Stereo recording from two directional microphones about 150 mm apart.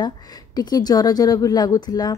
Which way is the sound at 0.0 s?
25° left (ahead or behind).